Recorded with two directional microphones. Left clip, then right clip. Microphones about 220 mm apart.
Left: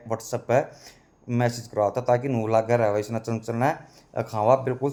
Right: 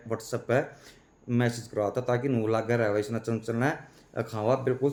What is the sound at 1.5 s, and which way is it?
Speech, 40° right (ahead or behind).